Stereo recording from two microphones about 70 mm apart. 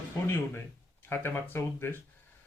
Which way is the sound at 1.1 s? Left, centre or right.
Left.